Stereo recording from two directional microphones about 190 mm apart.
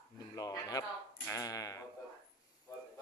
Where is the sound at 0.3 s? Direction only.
20° left (ahead or behind).